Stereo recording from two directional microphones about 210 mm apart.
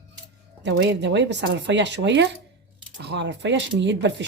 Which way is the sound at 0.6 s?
55° right (ahead or behind).